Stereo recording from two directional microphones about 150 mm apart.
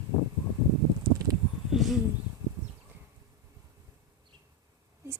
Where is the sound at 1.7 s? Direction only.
Centre (ahead or behind).